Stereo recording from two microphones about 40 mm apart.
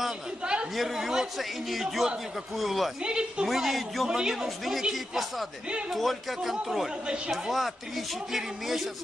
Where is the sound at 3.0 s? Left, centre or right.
Right.